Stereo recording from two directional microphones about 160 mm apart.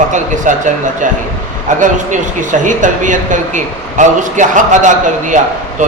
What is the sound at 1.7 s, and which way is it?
Speech, 50° right (ahead or behind).